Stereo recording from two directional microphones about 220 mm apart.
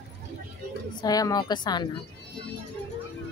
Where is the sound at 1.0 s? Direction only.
15° left (ahead or behind).